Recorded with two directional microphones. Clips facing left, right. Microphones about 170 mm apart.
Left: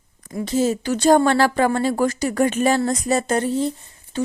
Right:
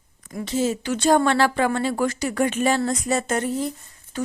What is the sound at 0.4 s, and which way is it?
Speech, 40° left (ahead or behind).